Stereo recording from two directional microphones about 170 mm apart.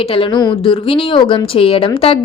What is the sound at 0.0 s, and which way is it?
Speech, 30° left (ahead or behind).